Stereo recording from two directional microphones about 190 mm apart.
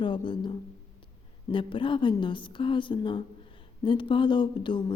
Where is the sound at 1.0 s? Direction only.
25° left (ahead or behind).